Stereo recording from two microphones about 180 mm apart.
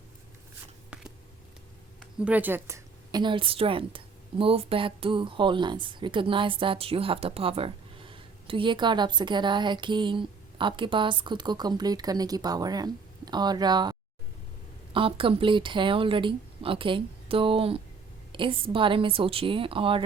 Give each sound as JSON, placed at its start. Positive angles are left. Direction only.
{"t": 2.1, "sound": "a woman's voice", "side_deg": -10}
{"t": 14.9, "sound": "a woman's voice", "side_deg": -30}